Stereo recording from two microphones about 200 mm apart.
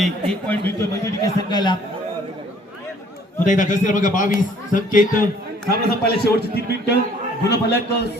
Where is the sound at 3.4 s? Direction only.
40° left (ahead or behind); by 8.0 s 55° left (ahead or behind).